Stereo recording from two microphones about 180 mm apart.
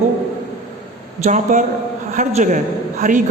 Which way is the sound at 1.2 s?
40° right (ahead or behind).